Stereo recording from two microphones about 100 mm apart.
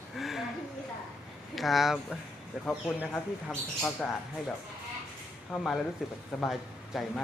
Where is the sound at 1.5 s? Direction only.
Centre (ahead or behind).